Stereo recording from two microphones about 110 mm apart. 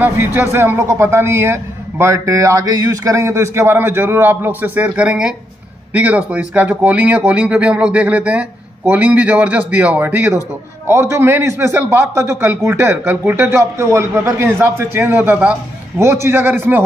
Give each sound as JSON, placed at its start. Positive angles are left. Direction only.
{"t": 0.0, "sound": "a man's voice", "side_deg": -20}